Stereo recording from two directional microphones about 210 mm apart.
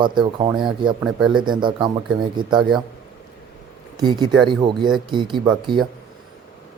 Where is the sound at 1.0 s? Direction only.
5° right (ahead or behind).